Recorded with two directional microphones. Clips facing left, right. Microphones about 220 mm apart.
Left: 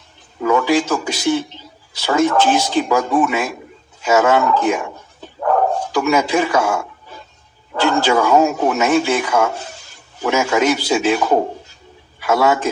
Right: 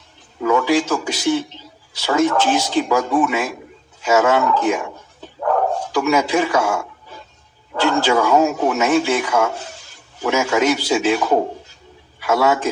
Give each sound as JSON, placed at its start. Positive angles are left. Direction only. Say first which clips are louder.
{"t": 0.4, "sound": "a man's voice", "louder": "left 1 dB", "side_deg": 50}